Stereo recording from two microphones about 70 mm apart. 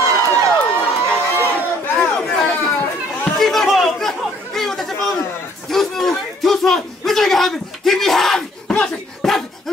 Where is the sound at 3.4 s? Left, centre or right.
Centre.